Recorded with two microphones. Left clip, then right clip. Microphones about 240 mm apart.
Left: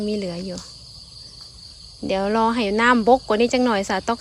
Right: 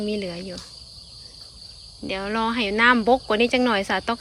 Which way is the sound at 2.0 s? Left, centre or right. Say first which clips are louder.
Left 5 dB; centre.